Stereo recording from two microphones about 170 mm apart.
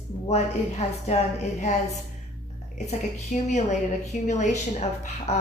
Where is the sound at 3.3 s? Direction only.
45° left (ahead or behind).